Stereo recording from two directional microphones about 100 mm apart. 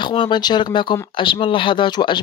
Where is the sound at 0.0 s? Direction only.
55° left (ahead or behind).